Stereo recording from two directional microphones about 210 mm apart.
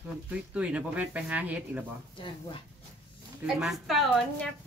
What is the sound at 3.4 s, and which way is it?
Speech, centre (ahead or behind).